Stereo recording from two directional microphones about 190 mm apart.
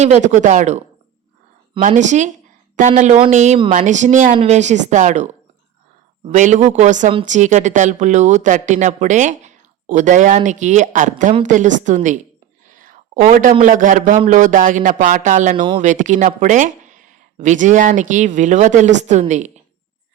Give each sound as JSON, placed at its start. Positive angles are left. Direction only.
{"t": 0.0, "sound": "a man's voice", "side_deg": -40}